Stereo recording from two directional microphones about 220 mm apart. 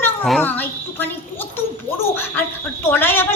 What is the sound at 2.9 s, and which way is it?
Speech, 10° left (ahead or behind).